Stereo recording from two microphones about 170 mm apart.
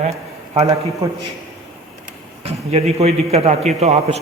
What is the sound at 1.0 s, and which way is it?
Speech, 20° right (ahead or behind).